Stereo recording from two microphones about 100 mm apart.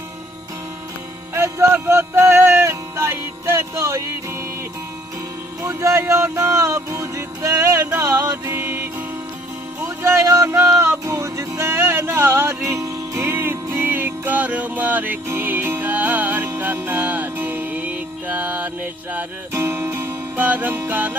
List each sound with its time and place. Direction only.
1.3 s music: 25° right (ahead or behind)
5.6 s music: 25° right (ahead or behind)
8.4 s music: 25° right (ahead or behind)